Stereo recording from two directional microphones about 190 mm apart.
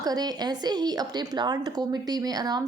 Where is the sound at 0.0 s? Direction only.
20° right (ahead or behind).